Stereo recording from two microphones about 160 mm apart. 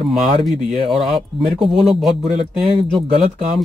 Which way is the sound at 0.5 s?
40° right (ahead or behind).